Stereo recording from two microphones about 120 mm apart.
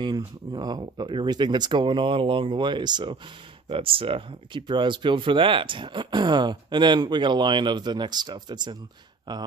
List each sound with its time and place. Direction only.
0.0 s speech: 35° right (ahead or behind)
3.6 s speech: 50° right (ahead or behind)